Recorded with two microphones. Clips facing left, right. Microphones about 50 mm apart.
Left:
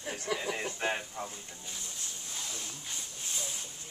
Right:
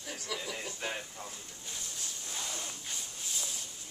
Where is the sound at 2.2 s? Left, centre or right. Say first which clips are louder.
Right 2 dB; centre.